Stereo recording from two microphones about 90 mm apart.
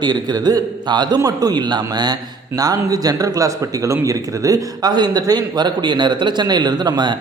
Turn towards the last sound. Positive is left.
turn(degrees=-55)  # may be behind; listen again after turning